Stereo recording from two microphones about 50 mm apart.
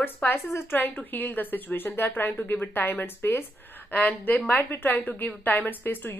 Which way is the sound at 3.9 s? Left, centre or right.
Left.